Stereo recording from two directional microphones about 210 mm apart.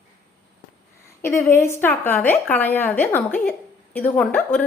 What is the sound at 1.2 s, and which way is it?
A woman's voice, 10° left (ahead or behind).